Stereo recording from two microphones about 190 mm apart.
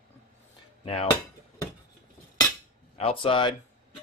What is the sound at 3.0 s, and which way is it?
Cutlery, 30° left (ahead or behind).